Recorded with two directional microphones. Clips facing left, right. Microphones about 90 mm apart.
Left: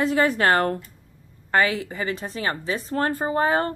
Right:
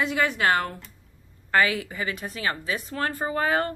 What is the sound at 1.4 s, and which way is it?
A woman's voice, 30° left (ahead or behind).